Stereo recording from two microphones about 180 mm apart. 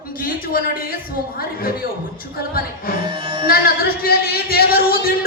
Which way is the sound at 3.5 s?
55° left (ahead or behind).